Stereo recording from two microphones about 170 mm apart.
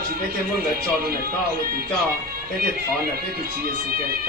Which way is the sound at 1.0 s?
65° right (ahead or behind).